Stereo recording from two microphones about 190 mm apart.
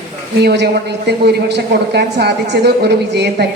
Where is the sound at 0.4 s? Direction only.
65° right (ahead or behind).